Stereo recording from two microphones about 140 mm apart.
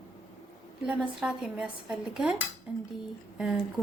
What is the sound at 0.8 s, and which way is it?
Speech, 5° right (ahead or behind).